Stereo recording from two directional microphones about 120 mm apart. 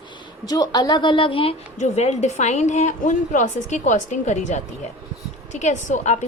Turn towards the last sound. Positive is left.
turn(degrees=85)